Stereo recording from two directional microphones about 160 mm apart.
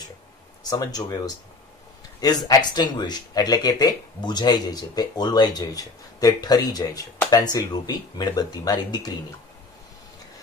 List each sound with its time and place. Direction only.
0.7 s speech: 25° left (ahead or behind)
2.4 s speech: 25° left (ahead or behind)